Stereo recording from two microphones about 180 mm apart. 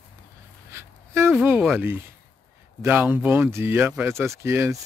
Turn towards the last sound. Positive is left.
turn(degrees=-15)  # may be behind; listen again after turning